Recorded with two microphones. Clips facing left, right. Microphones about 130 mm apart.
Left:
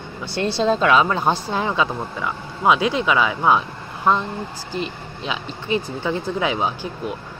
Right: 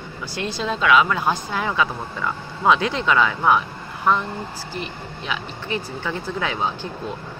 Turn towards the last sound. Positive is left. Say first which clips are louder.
# left 2 dB
turn(degrees=15)  # may be behind; listen again after turning